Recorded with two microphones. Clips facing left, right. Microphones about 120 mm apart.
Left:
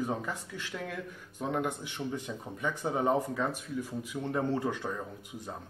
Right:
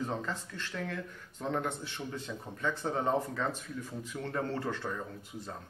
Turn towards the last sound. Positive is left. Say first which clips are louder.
# left 1 dB
turn(degrees=15)  # may be behind; listen again after turning